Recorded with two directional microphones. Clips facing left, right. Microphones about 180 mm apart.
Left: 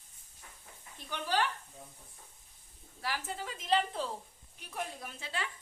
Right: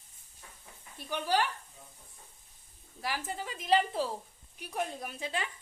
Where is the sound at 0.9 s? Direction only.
10° right (ahead or behind).